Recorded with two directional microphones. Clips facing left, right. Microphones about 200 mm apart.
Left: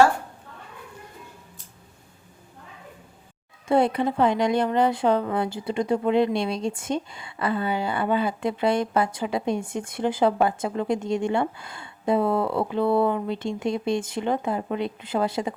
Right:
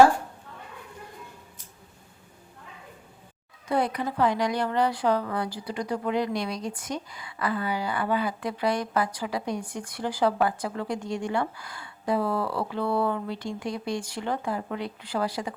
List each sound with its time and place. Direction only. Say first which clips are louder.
3.7 s speech: left 6 dB; 25° left (ahead or behind)